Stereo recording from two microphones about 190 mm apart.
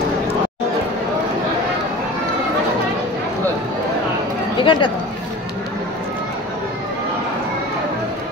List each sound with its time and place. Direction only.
4.6 s speech: 25° left (ahead or behind)